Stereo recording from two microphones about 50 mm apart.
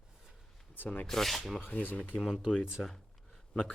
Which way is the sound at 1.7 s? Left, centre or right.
Left.